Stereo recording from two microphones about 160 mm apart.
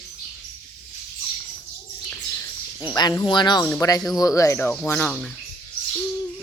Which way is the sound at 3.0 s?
25° left (ahead or behind).